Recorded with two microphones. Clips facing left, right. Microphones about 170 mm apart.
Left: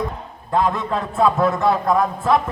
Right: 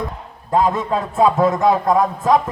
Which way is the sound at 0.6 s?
20° right (ahead or behind).